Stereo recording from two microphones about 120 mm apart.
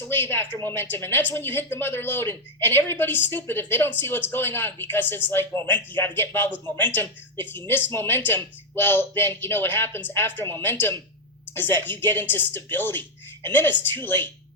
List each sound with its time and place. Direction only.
0.1 s speech: 20° left (ahead or behind)